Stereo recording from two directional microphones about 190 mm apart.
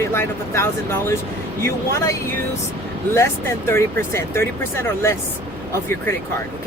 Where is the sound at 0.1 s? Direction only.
15° left (ahead or behind).